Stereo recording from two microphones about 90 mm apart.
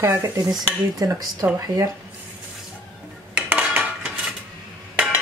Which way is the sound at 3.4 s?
15° right (ahead or behind).